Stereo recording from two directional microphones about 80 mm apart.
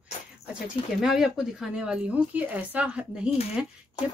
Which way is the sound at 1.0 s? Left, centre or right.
Centre.